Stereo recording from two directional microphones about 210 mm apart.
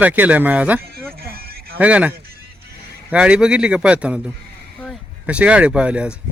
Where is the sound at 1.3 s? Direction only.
45° right (ahead or behind).